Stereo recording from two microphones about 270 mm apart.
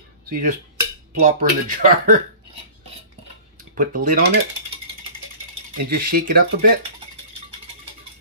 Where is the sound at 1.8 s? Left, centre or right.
Right.